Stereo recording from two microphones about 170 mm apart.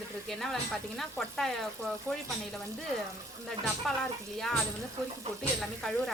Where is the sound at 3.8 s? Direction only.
Centre (ahead or behind).